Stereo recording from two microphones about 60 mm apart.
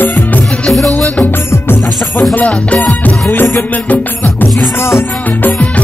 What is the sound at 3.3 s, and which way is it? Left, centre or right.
Music, left.